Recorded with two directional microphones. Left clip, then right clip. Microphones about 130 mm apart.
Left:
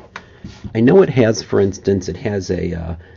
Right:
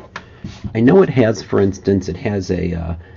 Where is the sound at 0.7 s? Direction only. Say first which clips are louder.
Even; 35° left (ahead or behind).